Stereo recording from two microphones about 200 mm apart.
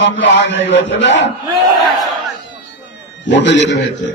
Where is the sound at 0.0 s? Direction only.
70° left (ahead or behind).